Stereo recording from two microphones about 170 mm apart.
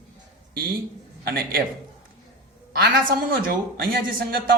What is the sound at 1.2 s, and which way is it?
Speech, 65° right (ahead or behind).